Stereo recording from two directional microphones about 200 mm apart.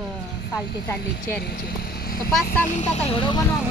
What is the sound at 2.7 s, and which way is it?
Speech, 35° left (ahead or behind).